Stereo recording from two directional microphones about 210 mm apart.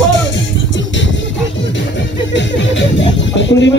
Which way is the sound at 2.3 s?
60° left (ahead or behind).